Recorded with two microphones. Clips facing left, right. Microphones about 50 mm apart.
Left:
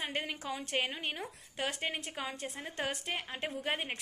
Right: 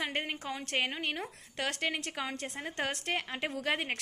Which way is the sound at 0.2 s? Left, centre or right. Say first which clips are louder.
Right 1 dB; right.